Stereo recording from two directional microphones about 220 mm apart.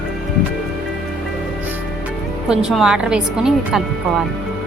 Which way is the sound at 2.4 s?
5° right (ahead or behind).